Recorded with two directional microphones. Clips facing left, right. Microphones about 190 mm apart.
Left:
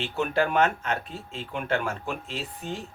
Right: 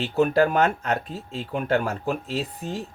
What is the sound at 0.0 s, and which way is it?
Speech, 40° right (ahead or behind).